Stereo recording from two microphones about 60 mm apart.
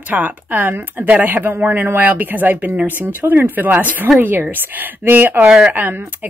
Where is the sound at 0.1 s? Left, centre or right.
Right.